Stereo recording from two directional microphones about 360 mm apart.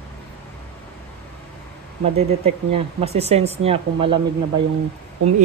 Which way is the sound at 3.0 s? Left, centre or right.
Centre.